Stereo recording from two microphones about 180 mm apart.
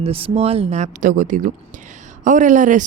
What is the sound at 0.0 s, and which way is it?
Speech, 30° right (ahead or behind).